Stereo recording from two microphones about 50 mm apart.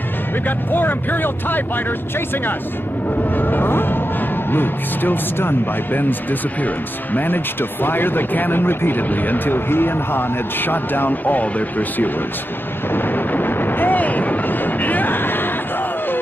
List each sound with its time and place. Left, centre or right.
0.7 s speech: left
3.3 s music: left
4.5 s speech: left
12.9 s artillery fire: left